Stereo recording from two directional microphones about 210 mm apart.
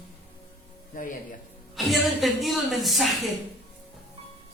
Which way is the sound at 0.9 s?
40° left (ahead or behind).